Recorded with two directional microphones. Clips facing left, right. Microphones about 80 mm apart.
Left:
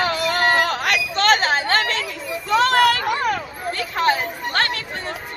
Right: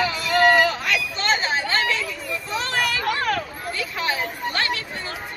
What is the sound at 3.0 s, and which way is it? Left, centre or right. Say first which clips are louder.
Speech: left 2 dB; centre.